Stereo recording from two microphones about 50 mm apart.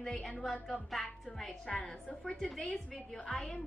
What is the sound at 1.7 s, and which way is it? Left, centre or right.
A woman's voice, left.